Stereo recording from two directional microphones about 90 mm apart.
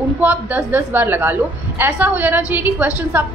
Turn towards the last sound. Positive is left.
turn(degrees=-20)  # may be behind; listen again after turning